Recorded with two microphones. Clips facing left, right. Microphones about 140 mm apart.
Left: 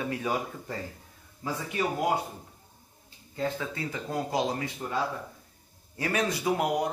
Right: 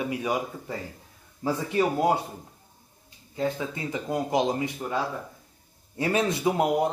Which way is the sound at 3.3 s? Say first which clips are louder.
Right 3 dB; 20° right (ahead or behind).